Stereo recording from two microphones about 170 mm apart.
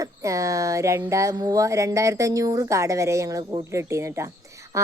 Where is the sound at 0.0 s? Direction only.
20° right (ahead or behind).